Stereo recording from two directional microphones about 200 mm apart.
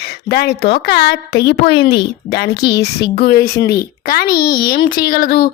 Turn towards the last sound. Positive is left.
turn(degrees=50)  # may be behind; listen again after turning